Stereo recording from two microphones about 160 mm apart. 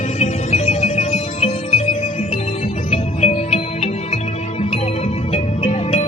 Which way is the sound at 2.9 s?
40° left (ahead or behind).